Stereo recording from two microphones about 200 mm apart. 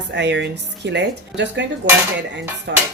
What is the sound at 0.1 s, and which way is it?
Speech, 60° right (ahead or behind).